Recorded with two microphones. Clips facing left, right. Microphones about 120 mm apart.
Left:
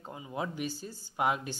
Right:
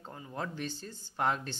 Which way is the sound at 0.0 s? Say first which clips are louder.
Left 3 dB; 10° left (ahead or behind).